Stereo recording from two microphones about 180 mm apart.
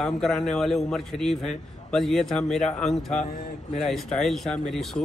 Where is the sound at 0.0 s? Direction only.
Centre (ahead or behind).